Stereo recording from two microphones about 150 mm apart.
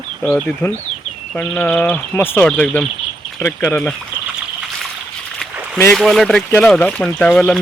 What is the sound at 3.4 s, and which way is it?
Speech, 20° left (ahead or behind).